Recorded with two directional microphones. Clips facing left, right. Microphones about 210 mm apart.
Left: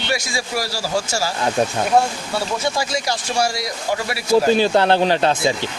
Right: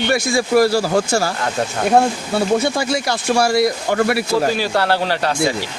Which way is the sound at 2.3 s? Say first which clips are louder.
Right 5 dB; 60° right (ahead or behind).